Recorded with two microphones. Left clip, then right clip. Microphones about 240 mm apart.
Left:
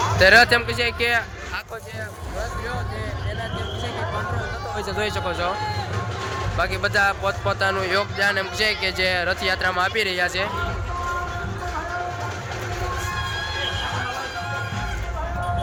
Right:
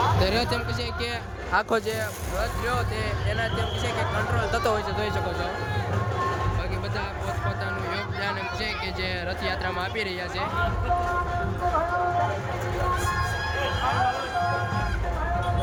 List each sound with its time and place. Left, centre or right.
0.2 s speech: centre
6.6 s speech: centre